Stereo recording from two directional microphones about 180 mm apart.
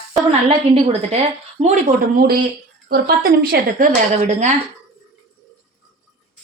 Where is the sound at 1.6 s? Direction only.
45° right (ahead or behind).